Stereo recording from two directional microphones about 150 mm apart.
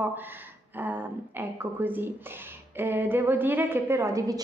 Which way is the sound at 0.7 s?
15° right (ahead or behind).